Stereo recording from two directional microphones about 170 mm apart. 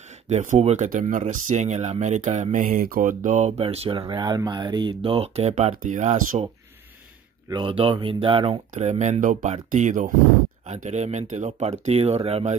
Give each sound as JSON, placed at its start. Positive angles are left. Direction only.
{"t": 0.3, "sound": "speech", "side_deg": -45}
{"t": 4.0, "sound": "speech", "side_deg": -25}
{"t": 7.4, "sound": "speech", "side_deg": -30}
{"t": 8.7, "sound": "speech", "side_deg": -45}